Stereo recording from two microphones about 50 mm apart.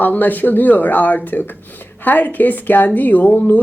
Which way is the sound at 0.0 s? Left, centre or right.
Left.